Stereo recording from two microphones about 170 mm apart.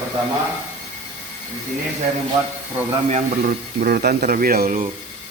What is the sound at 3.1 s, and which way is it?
Speech, 50° right (ahead or behind).